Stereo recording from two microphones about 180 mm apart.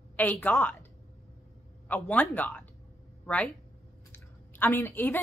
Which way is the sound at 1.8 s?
10° left (ahead or behind).